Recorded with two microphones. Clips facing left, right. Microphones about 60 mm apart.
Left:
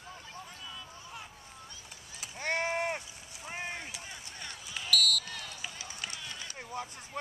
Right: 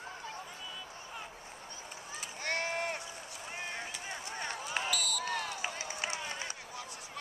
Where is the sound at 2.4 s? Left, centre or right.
Centre.